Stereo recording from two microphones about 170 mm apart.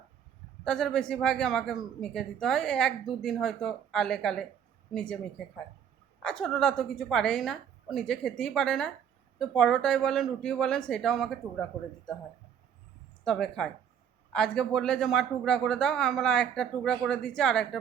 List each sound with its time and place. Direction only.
0.6 s speech: 5° left (ahead or behind)
6.2 s speech: centre (ahead or behind)
13.2 s speech: 5° left (ahead or behind)